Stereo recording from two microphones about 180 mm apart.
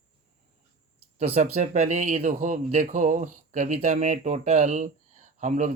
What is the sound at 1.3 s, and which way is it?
Speech, 40° right (ahead or behind).